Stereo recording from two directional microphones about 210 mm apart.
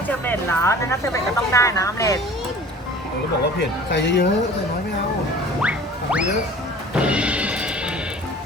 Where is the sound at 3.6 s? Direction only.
55° left (ahead or behind).